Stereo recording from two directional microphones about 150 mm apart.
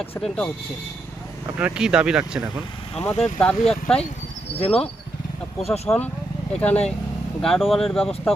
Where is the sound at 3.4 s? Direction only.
5° left (ahead or behind).